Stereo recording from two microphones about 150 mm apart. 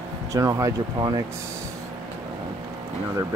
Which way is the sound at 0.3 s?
20° right (ahead or behind).